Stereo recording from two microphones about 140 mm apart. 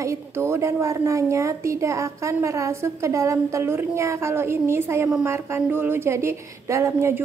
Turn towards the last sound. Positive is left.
turn(degrees=-20)  # may be behind; listen again after turning